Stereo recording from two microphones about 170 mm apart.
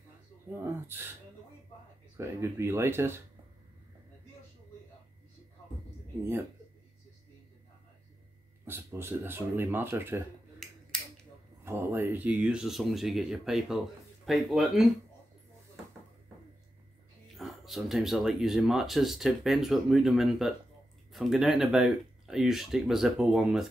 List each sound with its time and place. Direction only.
0.5 s speech: 15° right (ahead or behind)
2.1 s speech: 15° right (ahead or behind)
8.6 s speech: 15° right (ahead or behind)
10.6 s finger snapping: centre (ahead or behind)
11.6 s speech: 15° right (ahead or behind)
17.4 s speech: centre (ahead or behind)